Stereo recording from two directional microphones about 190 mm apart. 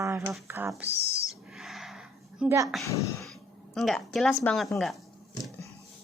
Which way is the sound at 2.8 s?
15° left (ahead or behind).